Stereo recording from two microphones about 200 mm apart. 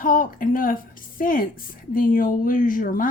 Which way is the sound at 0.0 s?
45° left (ahead or behind).